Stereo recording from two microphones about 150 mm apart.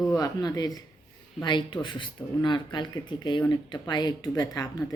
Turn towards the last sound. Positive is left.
turn(degrees=25)  # may be behind; listen again after turning